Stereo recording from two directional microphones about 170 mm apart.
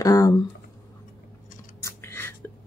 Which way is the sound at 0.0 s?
20° left (ahead or behind).